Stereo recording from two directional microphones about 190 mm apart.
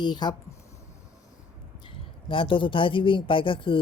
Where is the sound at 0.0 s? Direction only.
25° left (ahead or behind).